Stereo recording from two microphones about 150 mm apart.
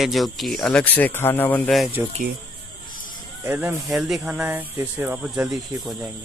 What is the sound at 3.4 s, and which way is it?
Speech, 10° right (ahead or behind).